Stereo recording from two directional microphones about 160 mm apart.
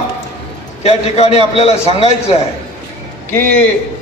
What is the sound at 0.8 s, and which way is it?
A man's voice, 40° left (ahead or behind).